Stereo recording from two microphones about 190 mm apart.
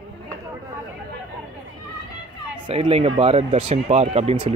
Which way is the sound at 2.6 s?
30° right (ahead or behind).